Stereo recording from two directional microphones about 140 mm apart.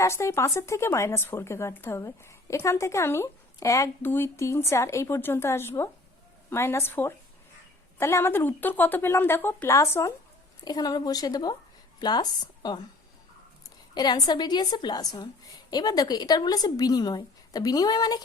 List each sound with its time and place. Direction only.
0.0 s a woman's voice: 20° left (ahead or behind)
13.9 s speech: 30° left (ahead or behind)